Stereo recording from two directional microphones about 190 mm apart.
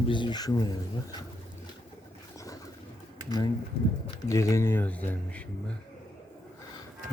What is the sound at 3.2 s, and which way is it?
Speech, 20° left (ahead or behind).